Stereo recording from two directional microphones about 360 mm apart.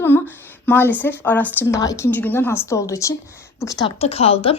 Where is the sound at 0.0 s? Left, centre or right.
Centre.